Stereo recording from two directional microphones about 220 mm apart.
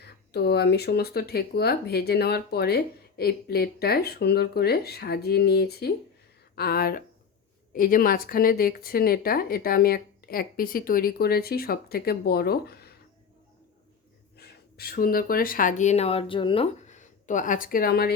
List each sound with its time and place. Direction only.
0.0 s speech: 45° left (ahead or behind)
14.3 s speech: 45° left (ahead or behind)